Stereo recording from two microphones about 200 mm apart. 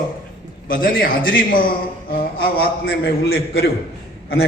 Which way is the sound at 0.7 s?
45° left (ahead or behind).